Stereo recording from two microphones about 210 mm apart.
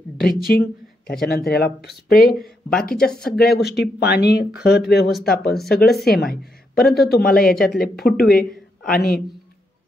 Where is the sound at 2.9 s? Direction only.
5° left (ahead or behind).